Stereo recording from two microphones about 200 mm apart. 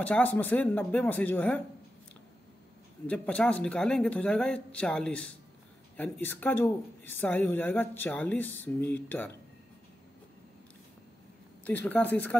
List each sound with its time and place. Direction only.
0.0 s speech: 5° left (ahead or behind)
3.1 s speech: 5° left (ahead or behind)
11.6 s speech: 10° left (ahead or behind)